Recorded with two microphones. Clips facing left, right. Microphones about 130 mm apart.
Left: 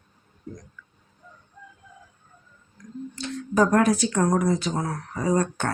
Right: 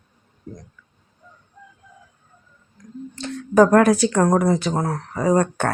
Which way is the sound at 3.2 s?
60° right (ahead or behind).